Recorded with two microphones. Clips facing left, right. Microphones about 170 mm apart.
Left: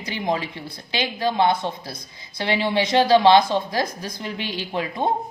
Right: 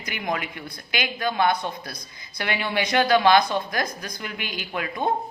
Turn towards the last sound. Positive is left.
turn(degrees=25)  # may be behind; listen again after turning